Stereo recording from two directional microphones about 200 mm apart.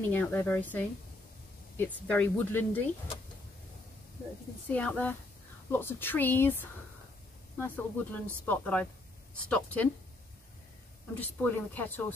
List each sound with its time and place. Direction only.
0.1 s speech: 10° left (ahead or behind)
2.0 s speech: 10° left (ahead or behind)
4.6 s speech: 5° left (ahead or behind)
11.1 s speech: 10° left (ahead or behind)